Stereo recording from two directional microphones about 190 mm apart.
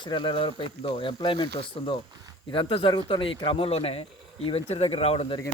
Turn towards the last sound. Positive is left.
turn(degrees=30)  # may be behind; listen again after turning